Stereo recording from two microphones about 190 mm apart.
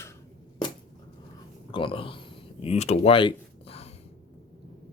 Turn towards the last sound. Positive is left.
turn(degrees=30)  # may be behind; listen again after turning